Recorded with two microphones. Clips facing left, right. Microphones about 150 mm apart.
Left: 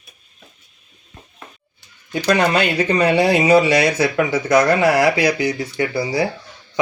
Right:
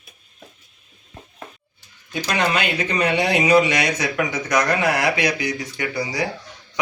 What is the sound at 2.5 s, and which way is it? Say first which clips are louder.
Speech: left 5 dB; 35° left (ahead or behind).